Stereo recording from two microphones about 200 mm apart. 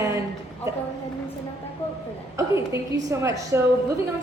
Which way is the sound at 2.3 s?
15° right (ahead or behind).